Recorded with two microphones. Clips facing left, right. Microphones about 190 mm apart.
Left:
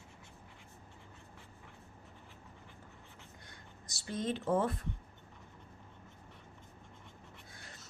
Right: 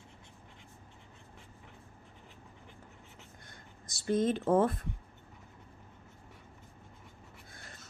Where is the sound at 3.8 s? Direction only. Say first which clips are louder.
Right 8 dB; 50° right (ahead or behind).